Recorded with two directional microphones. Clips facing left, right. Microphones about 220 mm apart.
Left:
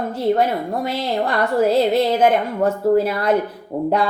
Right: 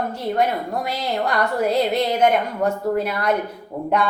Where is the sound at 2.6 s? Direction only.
30° left (ahead or behind).